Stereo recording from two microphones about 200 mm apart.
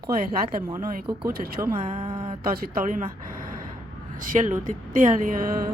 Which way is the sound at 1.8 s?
25° right (ahead or behind).